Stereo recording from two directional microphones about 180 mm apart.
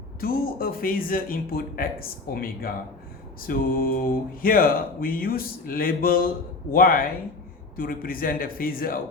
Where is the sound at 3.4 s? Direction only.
50° left (ahead or behind).